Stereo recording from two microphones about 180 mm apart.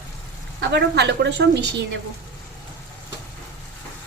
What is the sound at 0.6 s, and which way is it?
Speech, 70° right (ahead or behind).